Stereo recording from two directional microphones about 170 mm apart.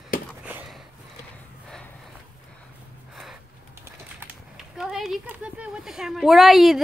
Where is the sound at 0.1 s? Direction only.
55° left (ahead or behind).